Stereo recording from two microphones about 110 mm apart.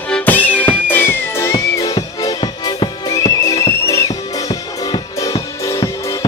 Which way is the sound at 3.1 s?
35° left (ahead or behind).